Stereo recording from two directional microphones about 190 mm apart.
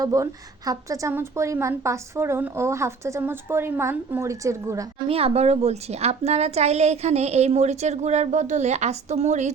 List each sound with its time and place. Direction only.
0.0 s a woman's voice: 20° right (ahead or behind)
5.0 s a woman's voice: 30° right (ahead or behind)